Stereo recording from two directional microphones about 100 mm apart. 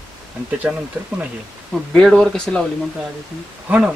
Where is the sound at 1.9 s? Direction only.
5° left (ahead or behind).